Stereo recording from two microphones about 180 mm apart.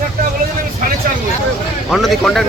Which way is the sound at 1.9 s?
Centre (ahead or behind).